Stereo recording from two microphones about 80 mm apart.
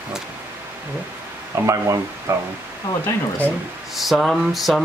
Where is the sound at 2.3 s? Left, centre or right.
Right.